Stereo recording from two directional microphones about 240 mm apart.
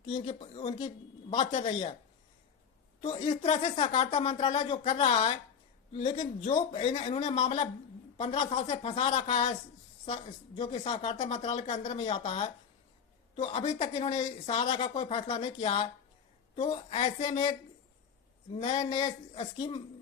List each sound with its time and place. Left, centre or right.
0.1 s speech: left
3.0 s speech: left
18.5 s speech: left